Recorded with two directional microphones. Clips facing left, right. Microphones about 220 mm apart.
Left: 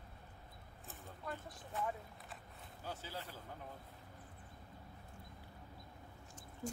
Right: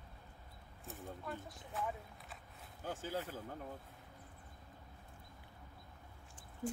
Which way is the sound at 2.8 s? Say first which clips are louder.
Right 6 dB; 50° right (ahead or behind).